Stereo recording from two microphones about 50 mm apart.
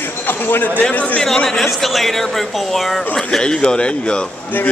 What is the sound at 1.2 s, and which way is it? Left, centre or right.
Speech, centre.